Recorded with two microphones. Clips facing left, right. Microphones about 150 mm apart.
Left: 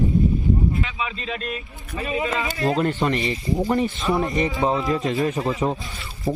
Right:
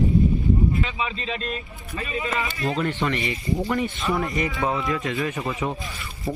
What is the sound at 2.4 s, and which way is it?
Speech, 40° left (ahead or behind).